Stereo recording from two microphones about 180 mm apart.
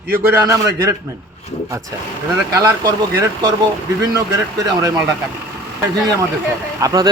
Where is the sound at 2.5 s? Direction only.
20° right (ahead or behind).